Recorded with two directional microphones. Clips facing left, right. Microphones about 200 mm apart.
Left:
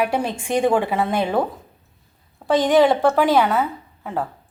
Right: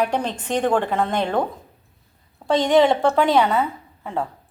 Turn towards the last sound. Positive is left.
turn(degrees=5)  # may be behind; listen again after turning